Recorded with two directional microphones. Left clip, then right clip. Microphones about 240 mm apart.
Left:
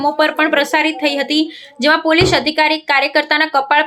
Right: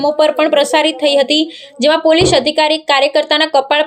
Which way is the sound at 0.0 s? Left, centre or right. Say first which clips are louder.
Right 2 dB; centre.